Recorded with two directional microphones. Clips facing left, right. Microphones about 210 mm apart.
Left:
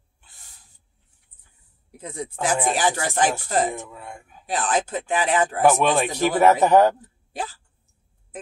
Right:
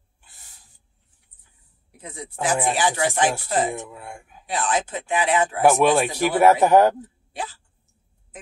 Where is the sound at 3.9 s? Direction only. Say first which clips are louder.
Right 1 dB; 10° right (ahead or behind).